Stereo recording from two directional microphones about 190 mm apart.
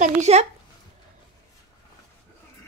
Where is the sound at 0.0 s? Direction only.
35° right (ahead or behind).